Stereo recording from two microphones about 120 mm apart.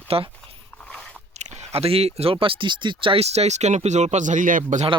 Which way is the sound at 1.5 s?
60° right (ahead or behind).